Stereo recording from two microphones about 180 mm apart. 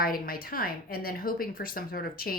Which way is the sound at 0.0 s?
55° left (ahead or behind).